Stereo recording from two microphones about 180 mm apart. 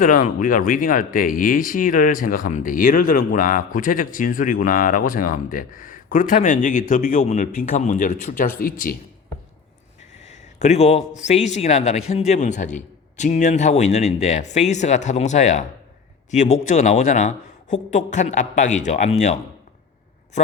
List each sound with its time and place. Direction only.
0.0 s speech: 45° left (ahead or behind)
10.2 s a sound: 40° left (ahead or behind)
11.2 s a man's voice: 40° left (ahead or behind)